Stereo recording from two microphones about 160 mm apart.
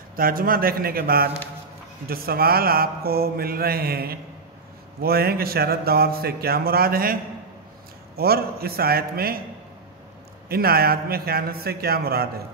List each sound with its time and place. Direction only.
0.1 s mantra: 65° right (ahead or behind)
8.2 s mantra: 70° right (ahead or behind)
10.5 s mantra: 70° right (ahead or behind)